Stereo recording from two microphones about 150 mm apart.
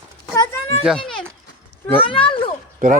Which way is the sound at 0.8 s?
Centre (ahead or behind).